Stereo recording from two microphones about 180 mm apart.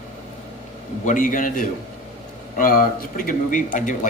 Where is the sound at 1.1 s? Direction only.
45° left (ahead or behind).